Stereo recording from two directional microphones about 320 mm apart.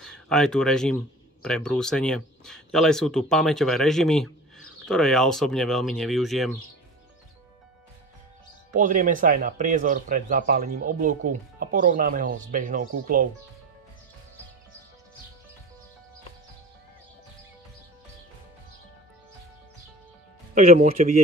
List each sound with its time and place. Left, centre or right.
0.0 s speech: centre
8.7 s speech: right
20.5 s speech: right